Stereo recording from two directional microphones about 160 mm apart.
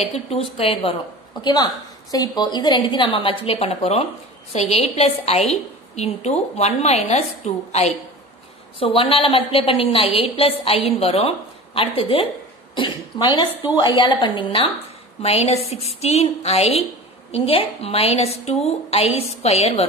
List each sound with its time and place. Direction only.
0.3 s a woman's voice: 35° left (ahead or behind)
1.4 s a woman's voice: 25° left (ahead or behind); by 19.9 s 40° left (ahead or behind)